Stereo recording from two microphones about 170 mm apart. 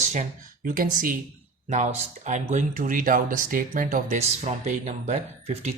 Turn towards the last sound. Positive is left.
turn(degrees=-45)  # may be behind; listen again after turning